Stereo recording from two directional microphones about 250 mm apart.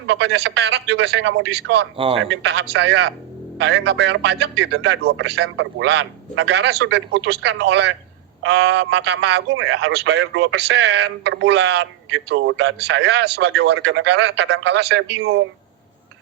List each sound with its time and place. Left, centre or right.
0.1 s speech: right
2.0 s a man's voice: right
2.3 s speech: right